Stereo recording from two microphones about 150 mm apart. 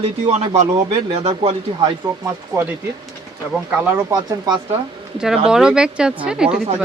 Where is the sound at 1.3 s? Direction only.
35° right (ahead or behind).